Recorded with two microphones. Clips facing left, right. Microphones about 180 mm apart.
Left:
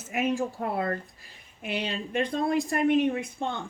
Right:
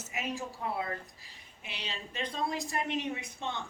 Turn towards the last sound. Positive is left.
turn(degrees=50)  # may be behind; listen again after turning